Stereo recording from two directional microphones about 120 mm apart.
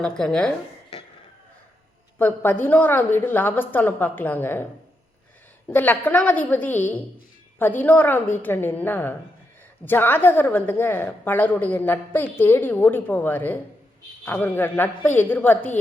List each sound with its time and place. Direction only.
0.0 s speech: 5° left (ahead or behind)
2.1 s a woman's voice: 15° left (ahead or behind)
5.6 s a woman's voice: 15° left (ahead or behind)